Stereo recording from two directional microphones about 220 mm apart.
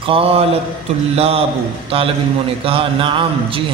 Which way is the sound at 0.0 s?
25° right (ahead or behind).